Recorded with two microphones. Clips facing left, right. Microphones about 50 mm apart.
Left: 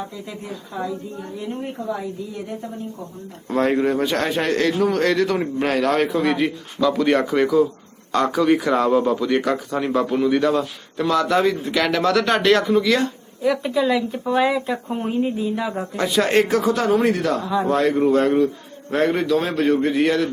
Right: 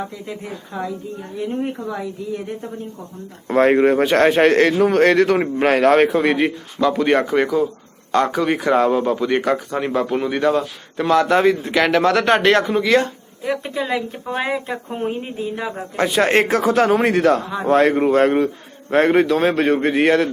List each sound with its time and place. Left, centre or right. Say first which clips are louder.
3.4 s a man's voice: right 5 dB; right
6.7 s a man's voice: right 1 dB; right
16.0 s a man's voice: right 2 dB; right